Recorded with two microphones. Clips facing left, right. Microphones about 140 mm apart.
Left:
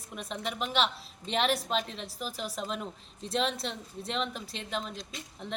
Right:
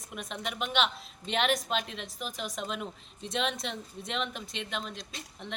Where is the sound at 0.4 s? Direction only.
Centre (ahead or behind).